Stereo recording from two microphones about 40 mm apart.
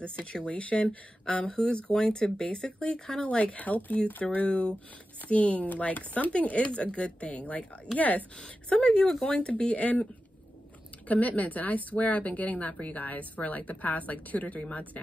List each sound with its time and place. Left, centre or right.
0.0 s speech: left
1.2 s speech: left
3.3 s speech: left
11.1 s speech: left